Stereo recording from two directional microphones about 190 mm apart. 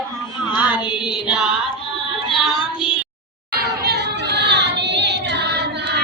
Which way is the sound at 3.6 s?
55° right (ahead or behind).